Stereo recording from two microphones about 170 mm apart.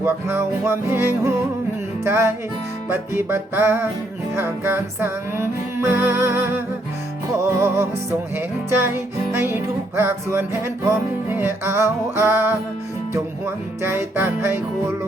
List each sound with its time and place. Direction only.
0.0 s music: 15° right (ahead or behind)
9.3 s music: 15° right (ahead or behind)
13.8 s music: 15° right (ahead or behind)